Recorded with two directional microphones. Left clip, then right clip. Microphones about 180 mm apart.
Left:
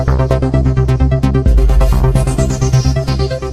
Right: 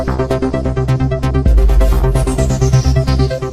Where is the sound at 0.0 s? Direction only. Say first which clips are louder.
Even; centre (ahead or behind).